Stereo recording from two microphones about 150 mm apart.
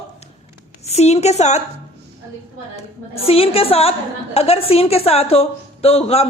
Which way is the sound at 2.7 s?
40° left (ahead or behind).